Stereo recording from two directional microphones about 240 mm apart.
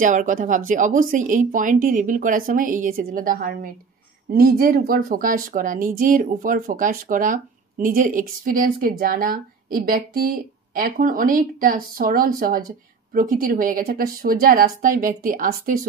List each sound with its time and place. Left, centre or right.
0.0 s speech: right